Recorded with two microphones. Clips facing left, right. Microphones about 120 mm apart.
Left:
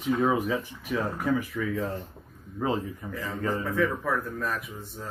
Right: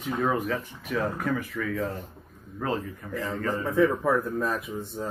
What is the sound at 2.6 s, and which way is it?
Speech, 15° left (ahead or behind).